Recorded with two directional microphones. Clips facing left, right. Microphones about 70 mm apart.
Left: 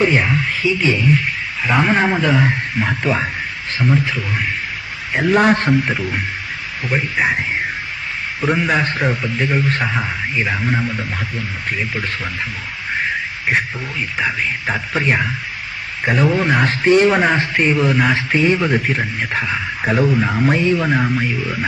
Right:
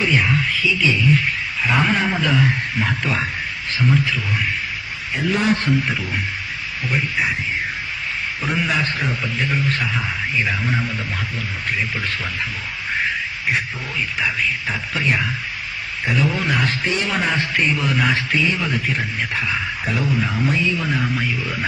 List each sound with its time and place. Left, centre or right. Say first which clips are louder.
0.0 s radio: left 4 dB; left
0.6 s speech: left 4 dB; left
1.6 s a man's voice: left 3 dB; centre
1.9 s a man's voice: left 4 dB; left
5.1 s a man's voice: left 6 dB; left
7.2 s a man's voice: left 7 dB; left
8.6 s speech: left 4 dB; left
10.0 s a man's voice: left 2 dB; left
14.7 s speech: left 7 dB; left
20.5 s a man's voice: left 6 dB; left
20.7 s speech: left 5 dB; left
21.2 s a man's voice: left 3 dB; centre